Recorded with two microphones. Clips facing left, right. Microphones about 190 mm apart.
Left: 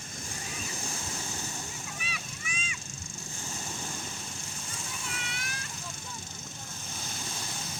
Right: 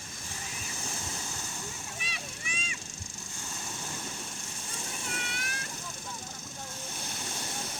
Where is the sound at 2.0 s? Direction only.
35° right (ahead or behind).